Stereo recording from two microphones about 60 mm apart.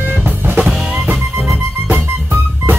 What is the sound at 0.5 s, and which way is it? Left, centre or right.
Music, right.